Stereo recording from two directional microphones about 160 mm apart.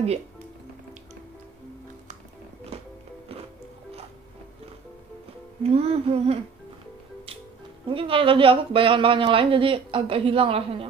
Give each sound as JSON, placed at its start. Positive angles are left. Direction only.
{"t": 5.6, "sound": "a woman's voice", "side_deg": -40}
{"t": 7.9, "sound": "a woman's voice", "side_deg": -35}